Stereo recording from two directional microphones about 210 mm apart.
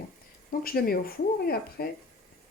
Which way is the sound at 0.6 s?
45° left (ahead or behind).